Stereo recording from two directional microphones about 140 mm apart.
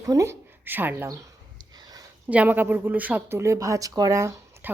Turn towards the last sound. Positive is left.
turn(degrees=-20)  # may be behind; listen again after turning